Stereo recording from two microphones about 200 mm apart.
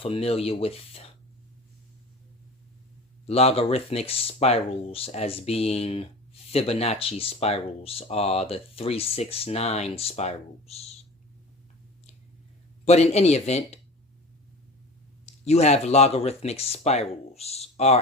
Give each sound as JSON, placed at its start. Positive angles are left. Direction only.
{"t": 0.0, "sound": "speech", "side_deg": 30}
{"t": 3.2, "sound": "speech", "side_deg": 30}
{"t": 12.8, "sound": "speech", "side_deg": 35}
{"t": 15.4, "sound": "speech", "side_deg": 35}